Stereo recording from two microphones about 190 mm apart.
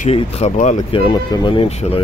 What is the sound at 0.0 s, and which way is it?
Speech, 35° left (ahead or behind).